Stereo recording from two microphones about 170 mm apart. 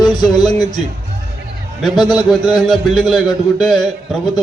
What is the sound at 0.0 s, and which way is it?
Speech, 25° left (ahead or behind).